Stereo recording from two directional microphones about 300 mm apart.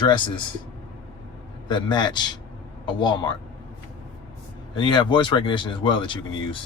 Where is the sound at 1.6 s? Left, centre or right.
Centre.